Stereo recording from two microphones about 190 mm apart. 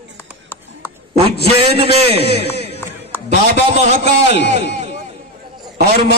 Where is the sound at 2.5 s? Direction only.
30° right (ahead or behind).